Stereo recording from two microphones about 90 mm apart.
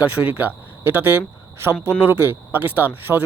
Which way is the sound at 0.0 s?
15° right (ahead or behind).